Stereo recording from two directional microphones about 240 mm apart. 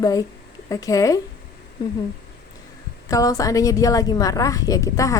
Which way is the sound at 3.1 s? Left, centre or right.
Centre.